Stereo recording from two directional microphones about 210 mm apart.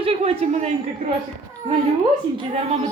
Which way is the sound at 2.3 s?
30° right (ahead or behind).